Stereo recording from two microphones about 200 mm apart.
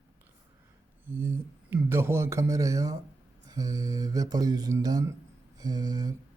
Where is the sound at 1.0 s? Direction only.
10° right (ahead or behind).